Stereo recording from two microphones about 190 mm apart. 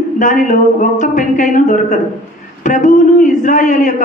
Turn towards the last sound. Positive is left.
turn(degrees=40)  # may be behind; listen again after turning